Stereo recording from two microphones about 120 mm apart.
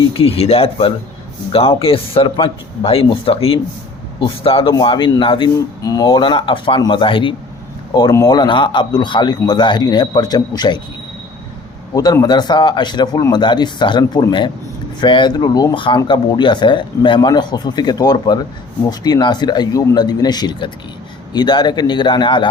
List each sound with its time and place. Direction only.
0.1 s speech: 55° left (ahead or behind)
5.5 s speech: 30° left (ahead or behind)
8.1 s a man's voice: 30° left (ahead or behind)
11.9 s a man's voice: 30° left (ahead or behind)